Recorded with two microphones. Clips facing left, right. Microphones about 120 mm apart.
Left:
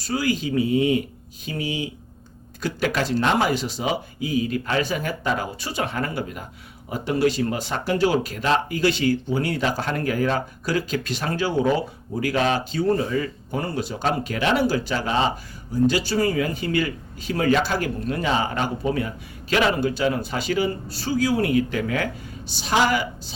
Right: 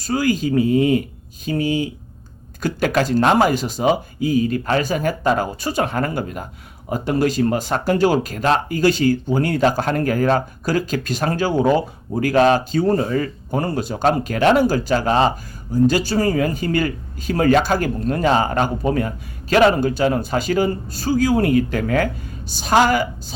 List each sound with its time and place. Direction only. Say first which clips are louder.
0.0 s speech: right 5 dB; 45° right (ahead or behind)